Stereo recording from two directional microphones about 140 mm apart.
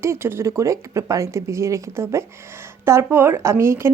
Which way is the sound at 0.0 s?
20° right (ahead or behind).